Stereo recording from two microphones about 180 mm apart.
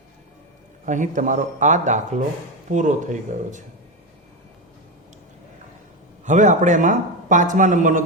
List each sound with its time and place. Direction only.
0.9 s speech: 45° right (ahead or behind)
6.2 s speech: 40° right (ahead or behind)